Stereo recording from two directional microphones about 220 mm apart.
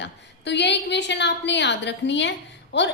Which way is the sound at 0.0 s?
50° left (ahead or behind).